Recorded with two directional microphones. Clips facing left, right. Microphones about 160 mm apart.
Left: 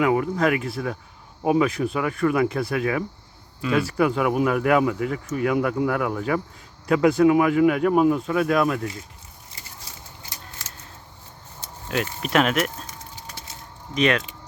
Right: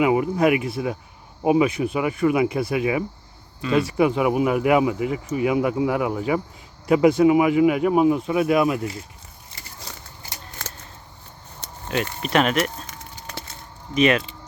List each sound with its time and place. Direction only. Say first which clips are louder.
0.0 s speech: right 2 dB; 10° right (ahead or behind)
11.6 s a sound: right 1 dB; 70° right (ahead or behind)
12.2 s speech: right 1 dB; centre (ahead or behind)
13.2 s wood: right 3 dB; 65° right (ahead or behind)
13.9 s speech: right 3 dB; 5° right (ahead or behind)